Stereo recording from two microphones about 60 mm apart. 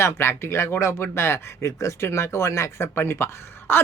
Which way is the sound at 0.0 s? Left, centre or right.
Left.